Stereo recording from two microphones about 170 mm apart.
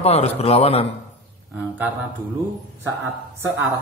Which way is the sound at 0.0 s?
35° left (ahead or behind).